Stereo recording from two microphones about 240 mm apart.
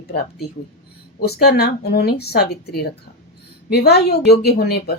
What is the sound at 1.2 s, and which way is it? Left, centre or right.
A woman's voice, left.